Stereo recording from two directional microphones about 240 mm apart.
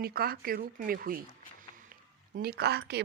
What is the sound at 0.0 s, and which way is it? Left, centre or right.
Speech, right.